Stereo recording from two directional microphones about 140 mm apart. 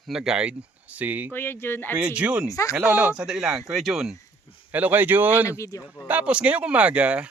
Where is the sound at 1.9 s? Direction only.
10° right (ahead or behind).